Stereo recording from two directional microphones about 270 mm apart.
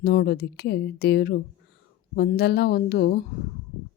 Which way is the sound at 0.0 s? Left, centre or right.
Left.